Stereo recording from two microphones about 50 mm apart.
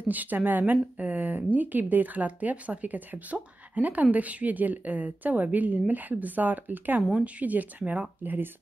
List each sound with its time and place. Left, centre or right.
0.0 s speech: right
8.2 s speech: right